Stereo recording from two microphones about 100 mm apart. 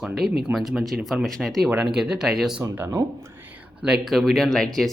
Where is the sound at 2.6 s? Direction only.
30° right (ahead or behind).